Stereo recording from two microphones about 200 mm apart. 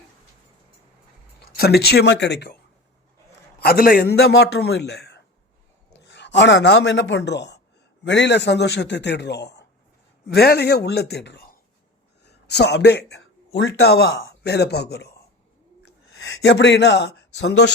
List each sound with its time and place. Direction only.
1.5 s a man's voice: 50° left (ahead or behind)
3.6 s a man's voice: 50° left (ahead or behind)
16.2 s speech: 60° left (ahead or behind)